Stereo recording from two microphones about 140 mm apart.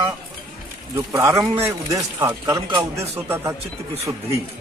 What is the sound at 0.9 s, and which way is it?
A man's voice, 20° right (ahead or behind).